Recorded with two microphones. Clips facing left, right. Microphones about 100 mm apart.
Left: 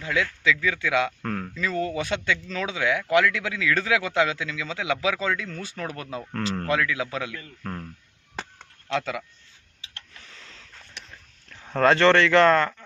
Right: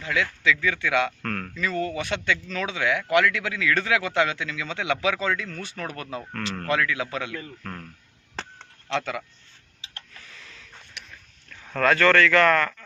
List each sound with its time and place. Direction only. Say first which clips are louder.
0.0 s speech: even; 20° left (ahead or behind)
5.9 s speech: left 1 dB; 20° left (ahead or behind)
6.7 s speech: even; 15° left (ahead or behind)
8.4 s chop: even; 10° left (ahead or behind)
10.2 s a sound: right 1 dB; 25° left (ahead or behind)